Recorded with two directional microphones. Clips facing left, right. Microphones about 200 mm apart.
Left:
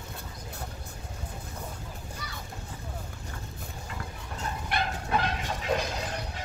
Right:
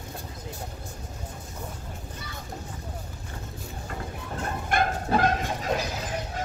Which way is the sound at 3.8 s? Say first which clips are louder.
Right 6 dB; 55° right (ahead or behind).